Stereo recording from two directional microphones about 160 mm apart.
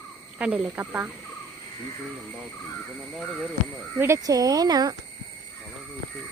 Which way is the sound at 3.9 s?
15° right (ahead or behind).